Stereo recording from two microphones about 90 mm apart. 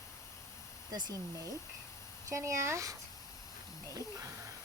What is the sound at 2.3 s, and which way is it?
Speech, 35° right (ahead or behind).